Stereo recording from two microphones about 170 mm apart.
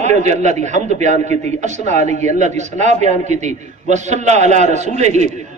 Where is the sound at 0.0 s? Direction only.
45° right (ahead or behind).